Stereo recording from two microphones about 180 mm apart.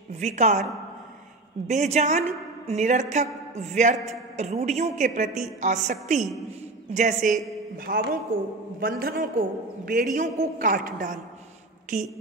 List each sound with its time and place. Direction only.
0.2 s a woman's voice: 40° right (ahead or behind)
1.7 s a woman's voice: 40° right (ahead or behind)
7.7 s a man's voice: 55° right (ahead or behind)